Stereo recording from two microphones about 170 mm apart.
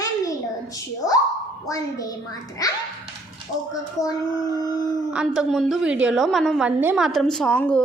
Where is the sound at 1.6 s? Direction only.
20° left (ahead or behind).